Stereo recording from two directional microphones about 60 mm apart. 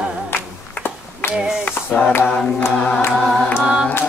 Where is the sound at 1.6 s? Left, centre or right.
Left.